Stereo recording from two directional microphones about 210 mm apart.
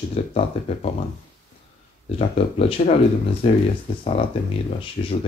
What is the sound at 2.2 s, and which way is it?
Speech, 30° left (ahead or behind).